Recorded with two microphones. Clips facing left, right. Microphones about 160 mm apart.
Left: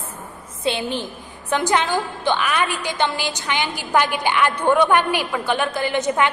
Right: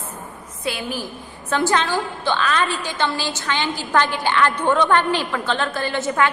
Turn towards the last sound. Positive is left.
turn(degrees=15)  # may be behind; listen again after turning